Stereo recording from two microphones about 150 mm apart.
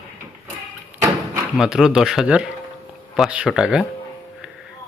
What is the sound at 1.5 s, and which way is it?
Speech, 5° right (ahead or behind).